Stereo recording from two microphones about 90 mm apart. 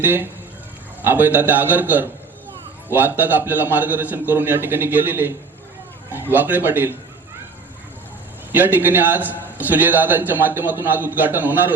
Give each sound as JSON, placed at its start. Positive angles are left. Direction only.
{"t": 0.0, "sound": "a man's voice", "side_deg": -20}
{"t": 6.3, "sound": "a man's voice", "side_deg": -20}
{"t": 8.5, "sound": "a man's voice", "side_deg": -20}